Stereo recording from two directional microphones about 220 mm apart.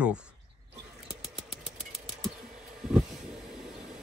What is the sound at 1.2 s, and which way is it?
Vehicle, 5° right (ahead or behind).